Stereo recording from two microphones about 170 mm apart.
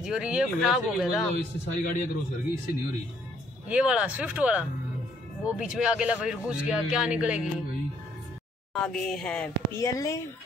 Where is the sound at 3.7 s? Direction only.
5° right (ahead or behind).